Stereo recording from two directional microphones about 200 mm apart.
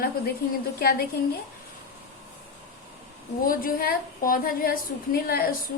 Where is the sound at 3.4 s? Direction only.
45° left (ahead or behind).